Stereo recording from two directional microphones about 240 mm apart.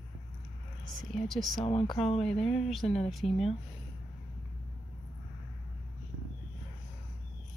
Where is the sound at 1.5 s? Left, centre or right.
Left.